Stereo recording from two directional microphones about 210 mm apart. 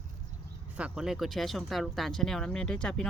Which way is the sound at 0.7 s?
5° right (ahead or behind).